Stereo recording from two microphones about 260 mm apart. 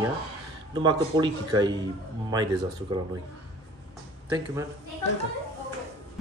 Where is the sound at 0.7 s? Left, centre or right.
Centre.